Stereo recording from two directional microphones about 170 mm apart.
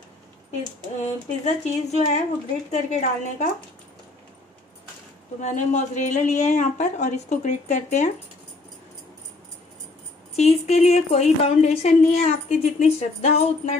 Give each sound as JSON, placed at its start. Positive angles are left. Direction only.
{"t": 1.4, "sound": "a woman's voice", "side_deg": 40}
{"t": 5.4, "sound": "a woman's voice", "side_deg": 45}
{"t": 10.3, "sound": "a woman's voice", "side_deg": 40}